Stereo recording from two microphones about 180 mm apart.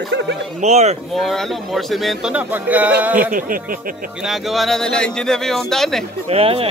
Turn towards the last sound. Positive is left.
turn(degrees=-35)  # may be behind; listen again after turning